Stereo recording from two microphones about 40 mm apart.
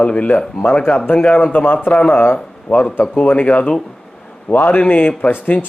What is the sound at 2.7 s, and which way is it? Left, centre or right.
Speech, left.